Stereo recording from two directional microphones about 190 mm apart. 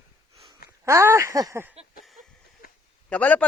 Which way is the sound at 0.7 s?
15° right (ahead or behind).